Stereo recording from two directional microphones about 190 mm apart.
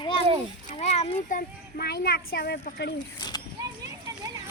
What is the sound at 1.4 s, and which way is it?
Speech, 55° left (ahead or behind).